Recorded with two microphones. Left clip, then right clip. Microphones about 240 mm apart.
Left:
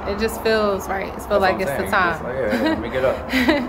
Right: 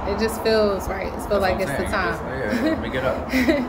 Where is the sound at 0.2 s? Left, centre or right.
Centre.